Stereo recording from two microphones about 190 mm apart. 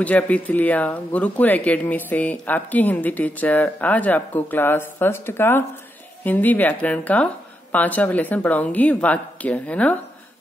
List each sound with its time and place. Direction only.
0.0 s speech: 10° left (ahead or behind)